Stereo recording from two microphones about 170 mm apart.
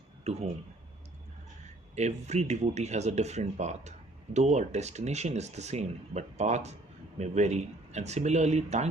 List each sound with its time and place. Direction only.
0.3 s speech: 40° right (ahead or behind)
2.0 s speech: 40° right (ahead or behind)